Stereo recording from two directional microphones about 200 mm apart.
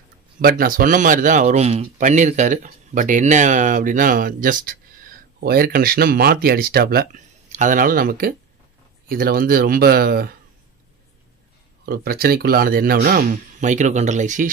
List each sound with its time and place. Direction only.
0.4 s speech: 45° right (ahead or behind)
11.8 s speech: 50° right (ahead or behind)